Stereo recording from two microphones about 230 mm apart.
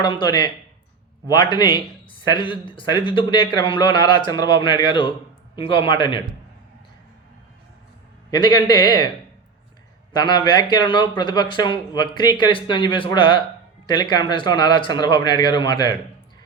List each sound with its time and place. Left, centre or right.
0.0 s speech: centre
8.3 s a man's voice: centre
10.2 s speech: centre